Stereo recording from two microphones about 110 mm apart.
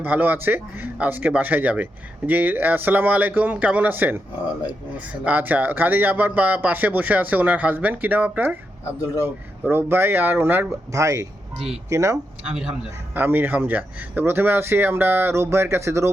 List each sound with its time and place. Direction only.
0.0 s speech: 15° right (ahead or behind)
8.8 s speech: 30° left (ahead or behind)
9.2 s speech: 20° right (ahead or behind)
10.9 s speech: 30° right (ahead or behind)
13.1 s speech: 20° right (ahead or behind)